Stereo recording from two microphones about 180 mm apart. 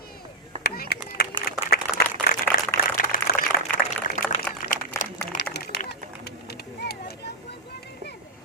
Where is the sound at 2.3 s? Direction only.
55° left (ahead or behind).